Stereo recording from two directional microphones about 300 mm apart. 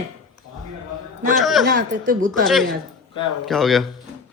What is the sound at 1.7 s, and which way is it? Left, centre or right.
Speech, right.